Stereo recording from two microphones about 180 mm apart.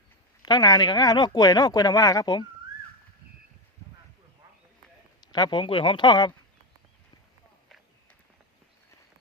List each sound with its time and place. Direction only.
0.4 s speech: 25° left (ahead or behind)
5.2 s speech: 25° left (ahead or behind)